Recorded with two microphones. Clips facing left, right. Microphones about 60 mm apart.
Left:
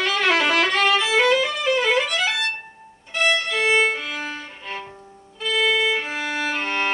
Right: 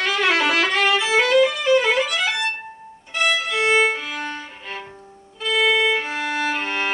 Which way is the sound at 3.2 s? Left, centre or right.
Centre.